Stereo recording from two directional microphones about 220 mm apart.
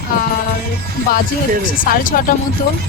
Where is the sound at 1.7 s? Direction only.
40° left (ahead or behind).